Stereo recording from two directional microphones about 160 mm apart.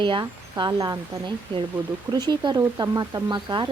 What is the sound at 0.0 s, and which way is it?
Speech, 30° right (ahead or behind).